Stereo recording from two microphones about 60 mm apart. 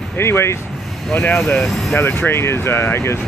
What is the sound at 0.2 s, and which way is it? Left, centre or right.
Speech, left.